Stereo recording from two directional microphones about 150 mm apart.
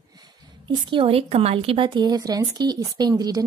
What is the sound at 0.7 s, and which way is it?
A woman's voice, 35° right (ahead or behind).